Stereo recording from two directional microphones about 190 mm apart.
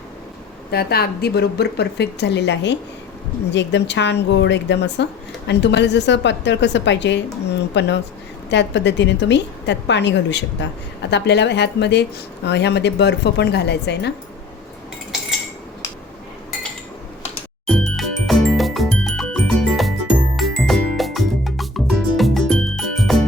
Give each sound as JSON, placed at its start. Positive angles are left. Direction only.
{"t": 0.7, "sound": "a woman's voice", "side_deg": 55}
{"t": 17.7, "sound": "music", "side_deg": 0}